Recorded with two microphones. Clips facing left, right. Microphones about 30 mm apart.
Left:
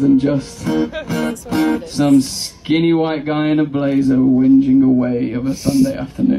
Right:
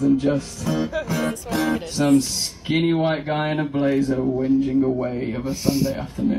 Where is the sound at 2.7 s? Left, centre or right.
Left.